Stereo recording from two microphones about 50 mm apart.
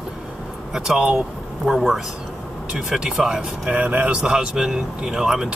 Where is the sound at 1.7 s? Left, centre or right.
Centre.